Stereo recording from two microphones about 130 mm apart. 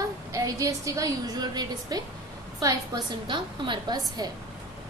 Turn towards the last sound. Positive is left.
turn(degrees=-30)  # may be behind; listen again after turning